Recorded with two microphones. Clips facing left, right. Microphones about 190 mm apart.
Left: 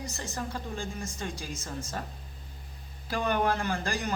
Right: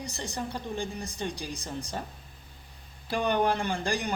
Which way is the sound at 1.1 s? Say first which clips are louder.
Right 2 dB; 35° right (ahead or behind).